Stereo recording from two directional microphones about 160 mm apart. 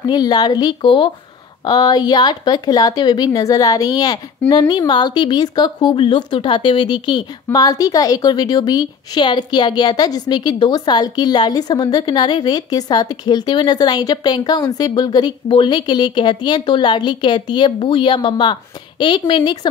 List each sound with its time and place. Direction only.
0.0 s a woman's voice: 25° left (ahead or behind)